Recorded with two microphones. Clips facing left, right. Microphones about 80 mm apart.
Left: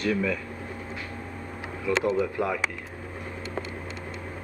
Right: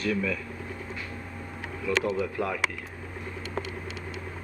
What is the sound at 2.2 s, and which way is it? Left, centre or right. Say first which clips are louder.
Speech: left 2 dB; centre.